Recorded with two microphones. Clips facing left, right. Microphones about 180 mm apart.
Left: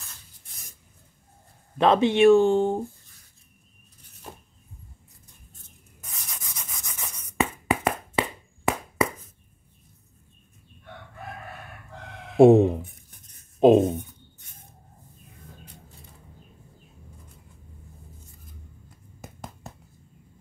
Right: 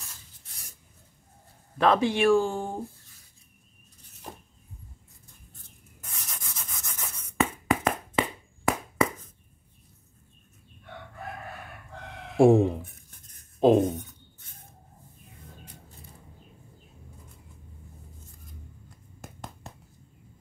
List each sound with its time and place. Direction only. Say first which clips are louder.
1.8 s speech: left 4 dB; 20° left (ahead or behind)
6.0 s sanding: even; centre (ahead or behind)
6.6 s rub: left 1 dB; centre (ahead or behind)
12.4 s speech: left 4 dB; 20° left (ahead or behind)
13.6 s writing: left 4 dB; 20° left (ahead or behind)
19.2 s finger snapping: left 2 dB; centre (ahead or behind)